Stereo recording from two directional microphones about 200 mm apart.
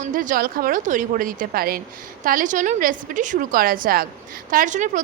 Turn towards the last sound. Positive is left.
turn(degrees=-40)  # may be behind; listen again after turning